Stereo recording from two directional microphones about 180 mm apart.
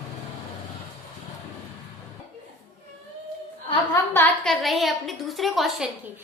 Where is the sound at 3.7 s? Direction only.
15° left (ahead or behind).